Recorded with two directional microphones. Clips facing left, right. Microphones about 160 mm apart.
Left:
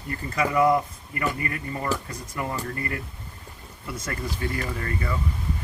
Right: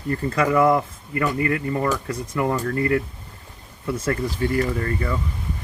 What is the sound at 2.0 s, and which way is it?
Speech, 60° right (ahead or behind).